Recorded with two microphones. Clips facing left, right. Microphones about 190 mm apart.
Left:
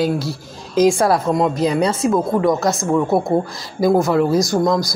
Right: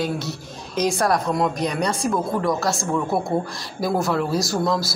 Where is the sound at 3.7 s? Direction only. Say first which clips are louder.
Left 7 dB; 20° left (ahead or behind).